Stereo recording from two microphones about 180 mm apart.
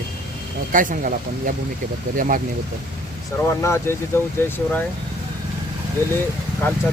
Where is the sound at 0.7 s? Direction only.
50° right (ahead or behind).